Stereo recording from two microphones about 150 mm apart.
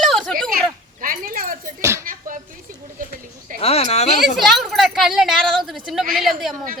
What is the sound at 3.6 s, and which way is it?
Speech, 45° left (ahead or behind).